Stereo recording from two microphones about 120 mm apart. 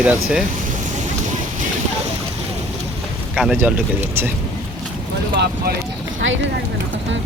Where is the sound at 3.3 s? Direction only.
5° right (ahead or behind).